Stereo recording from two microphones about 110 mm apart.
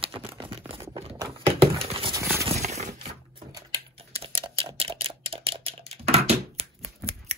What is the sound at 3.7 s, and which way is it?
Typing, 55° right (ahead or behind).